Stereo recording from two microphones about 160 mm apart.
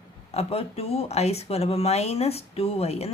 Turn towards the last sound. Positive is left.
turn(degrees=40)  # may be behind; listen again after turning